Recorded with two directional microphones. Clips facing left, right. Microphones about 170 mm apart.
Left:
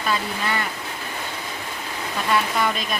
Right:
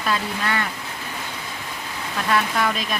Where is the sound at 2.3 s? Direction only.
Centre (ahead or behind).